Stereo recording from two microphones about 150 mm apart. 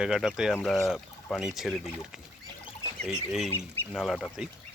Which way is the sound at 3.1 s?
5° right (ahead or behind).